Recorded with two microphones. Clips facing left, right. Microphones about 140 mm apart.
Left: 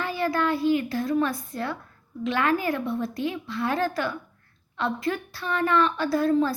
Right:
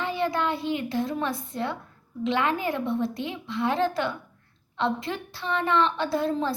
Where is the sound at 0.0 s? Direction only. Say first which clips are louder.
Left 1 dB; 20° right (ahead or behind).